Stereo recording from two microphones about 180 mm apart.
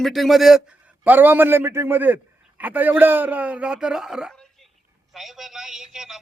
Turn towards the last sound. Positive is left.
turn(degrees=0)  # may be behind; listen again after turning